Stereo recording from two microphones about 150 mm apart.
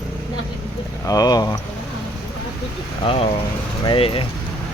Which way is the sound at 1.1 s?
25° left (ahead or behind).